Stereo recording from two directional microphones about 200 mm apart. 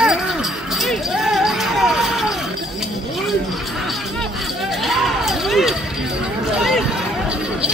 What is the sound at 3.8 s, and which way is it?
Music, centre (ahead or behind).